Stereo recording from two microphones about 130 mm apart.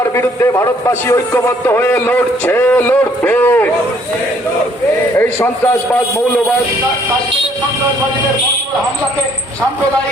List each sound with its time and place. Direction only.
0.0 s a man's voice: 20° left (ahead or behind)
5.1 s a man's voice: 20° left (ahead or behind)